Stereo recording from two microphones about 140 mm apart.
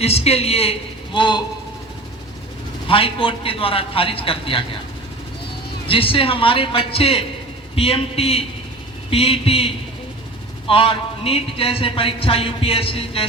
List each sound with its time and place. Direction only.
0.0 s a man's voice: 45° left (ahead or behind)
2.8 s speech: 40° left (ahead or behind)
5.9 s a man's voice: 40° left (ahead or behind)